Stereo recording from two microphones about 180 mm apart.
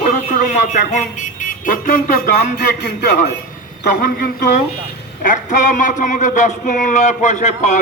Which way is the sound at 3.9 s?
50° left (ahead or behind).